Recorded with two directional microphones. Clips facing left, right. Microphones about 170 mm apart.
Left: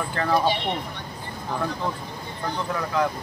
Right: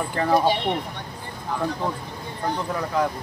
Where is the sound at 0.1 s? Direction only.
15° right (ahead or behind).